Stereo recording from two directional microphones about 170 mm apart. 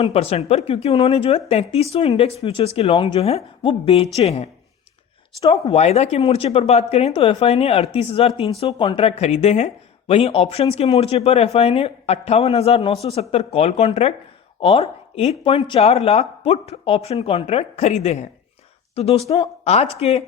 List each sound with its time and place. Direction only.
0.0 s speech: 35° left (ahead or behind)